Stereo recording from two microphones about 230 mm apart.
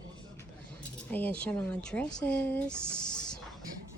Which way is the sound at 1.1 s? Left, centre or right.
Centre.